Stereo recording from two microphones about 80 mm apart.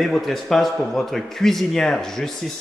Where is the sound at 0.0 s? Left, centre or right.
Centre.